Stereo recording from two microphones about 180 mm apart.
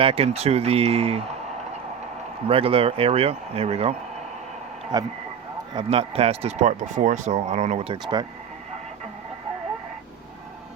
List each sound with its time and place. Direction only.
0.0 s speech: 35° right (ahead or behind)
2.5 s speech: 30° right (ahead or behind)
4.9 s speech: 25° right (ahead or behind)